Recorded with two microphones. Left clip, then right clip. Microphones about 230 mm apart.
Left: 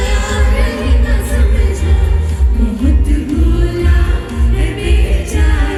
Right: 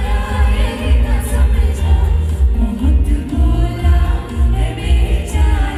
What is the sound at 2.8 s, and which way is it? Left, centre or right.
Music, left.